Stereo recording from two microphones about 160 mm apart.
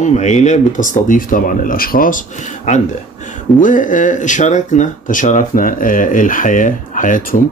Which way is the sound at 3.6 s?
55° left (ahead or behind).